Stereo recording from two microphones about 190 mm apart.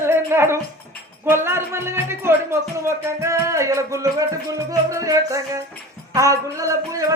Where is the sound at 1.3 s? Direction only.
15° right (ahead or behind).